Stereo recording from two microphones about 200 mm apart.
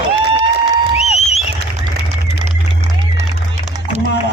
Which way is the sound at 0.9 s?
35° left (ahead or behind).